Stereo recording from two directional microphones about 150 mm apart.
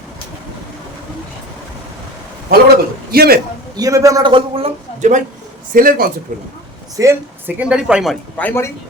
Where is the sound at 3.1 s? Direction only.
90° right.